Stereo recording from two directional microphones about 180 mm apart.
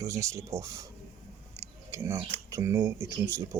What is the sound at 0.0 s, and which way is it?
Speech, 15° right (ahead or behind).